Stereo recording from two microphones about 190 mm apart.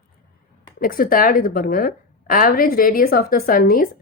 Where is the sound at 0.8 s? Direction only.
50° left (ahead or behind).